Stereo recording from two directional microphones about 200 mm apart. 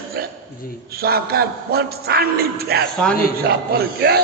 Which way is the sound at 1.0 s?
50° right (ahead or behind).